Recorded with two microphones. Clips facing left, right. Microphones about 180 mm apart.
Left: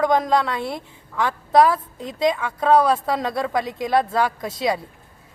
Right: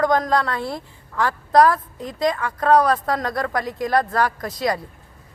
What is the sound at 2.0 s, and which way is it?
Speech, 25° left (ahead or behind).